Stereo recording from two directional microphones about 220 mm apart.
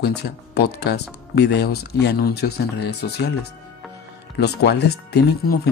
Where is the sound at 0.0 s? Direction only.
50° left (ahead or behind).